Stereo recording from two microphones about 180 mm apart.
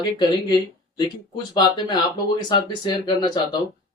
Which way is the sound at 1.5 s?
25° left (ahead or behind).